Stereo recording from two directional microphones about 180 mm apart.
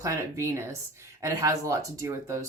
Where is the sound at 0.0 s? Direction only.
15° right (ahead or behind).